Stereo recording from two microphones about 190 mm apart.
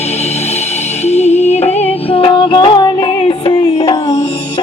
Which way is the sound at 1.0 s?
35° left (ahead or behind).